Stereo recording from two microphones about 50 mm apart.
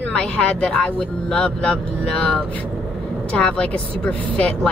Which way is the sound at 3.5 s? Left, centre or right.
Left.